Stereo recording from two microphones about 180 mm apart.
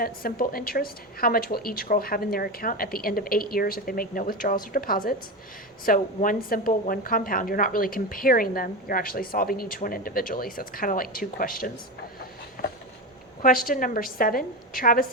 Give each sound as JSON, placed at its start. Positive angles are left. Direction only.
{"t": 0.0, "sound": "a woman's voice", "side_deg": 55}
{"t": 12.6, "sound": "a sound", "side_deg": 55}
{"t": 13.4, "sound": "a woman's voice", "side_deg": 50}